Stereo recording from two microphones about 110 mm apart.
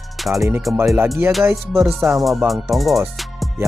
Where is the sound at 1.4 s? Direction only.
25° right (ahead or behind).